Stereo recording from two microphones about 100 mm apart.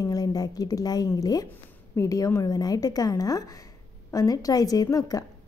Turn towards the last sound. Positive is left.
turn(degrees=35)  # may be behind; listen again after turning